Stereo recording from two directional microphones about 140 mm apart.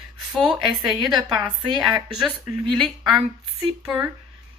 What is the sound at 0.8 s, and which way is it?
Speech, centre (ahead or behind).